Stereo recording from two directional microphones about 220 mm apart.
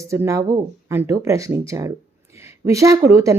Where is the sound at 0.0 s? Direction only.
15° right (ahead or behind).